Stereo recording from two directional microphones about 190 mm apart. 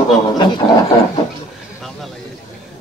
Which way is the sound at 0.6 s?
30° left (ahead or behind).